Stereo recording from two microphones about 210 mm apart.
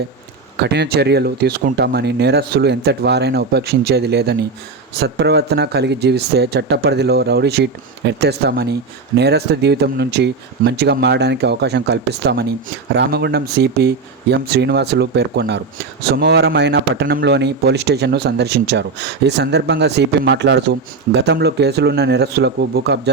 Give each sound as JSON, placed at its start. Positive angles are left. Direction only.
{"t": 0.5, "sound": "speech", "side_deg": -55}